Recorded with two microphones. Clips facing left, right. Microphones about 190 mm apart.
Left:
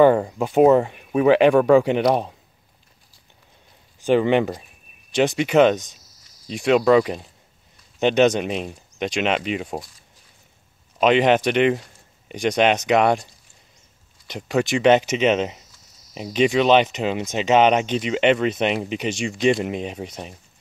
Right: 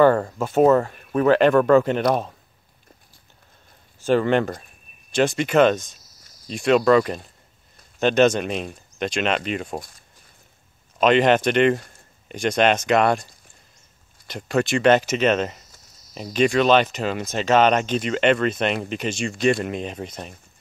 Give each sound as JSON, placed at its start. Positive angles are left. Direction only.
{"t": 0.0, "sound": "speech", "side_deg": 15}
{"t": 4.0, "sound": "speech", "side_deg": 15}
{"t": 9.8, "sound": "speech", "side_deg": -50}
{"t": 11.0, "sound": "speech", "side_deg": 15}